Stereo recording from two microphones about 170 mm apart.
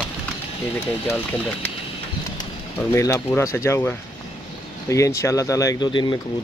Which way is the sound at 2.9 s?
15° left (ahead or behind).